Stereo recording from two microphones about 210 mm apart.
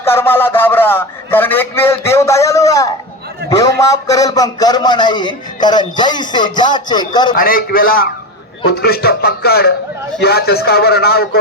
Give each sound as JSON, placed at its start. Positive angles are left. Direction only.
{"t": 0.0, "sound": "a man's voice", "side_deg": 10}
{"t": 7.3, "sound": "a man's voice", "side_deg": 45}